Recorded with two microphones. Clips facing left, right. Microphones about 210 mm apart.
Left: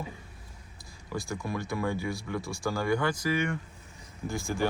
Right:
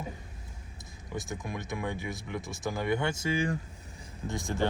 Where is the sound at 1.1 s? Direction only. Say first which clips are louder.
Left 3 dB; 20° right (ahead or behind).